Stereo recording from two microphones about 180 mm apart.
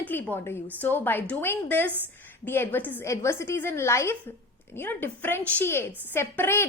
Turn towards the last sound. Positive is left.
turn(degrees=10)  # may be behind; listen again after turning